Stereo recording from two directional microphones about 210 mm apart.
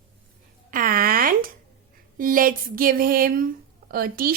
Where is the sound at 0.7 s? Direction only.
40° right (ahead or behind).